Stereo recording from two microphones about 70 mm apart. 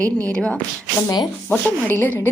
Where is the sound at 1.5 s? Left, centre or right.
Left.